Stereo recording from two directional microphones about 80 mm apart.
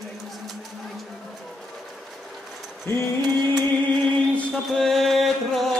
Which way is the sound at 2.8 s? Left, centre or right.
Left.